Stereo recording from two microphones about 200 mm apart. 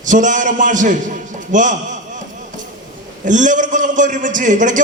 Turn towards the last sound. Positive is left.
turn(degrees=-40)  # may be behind; listen again after turning